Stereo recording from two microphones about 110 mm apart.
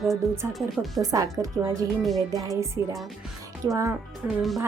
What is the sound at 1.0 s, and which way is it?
A woman's voice, 35° right (ahead or behind).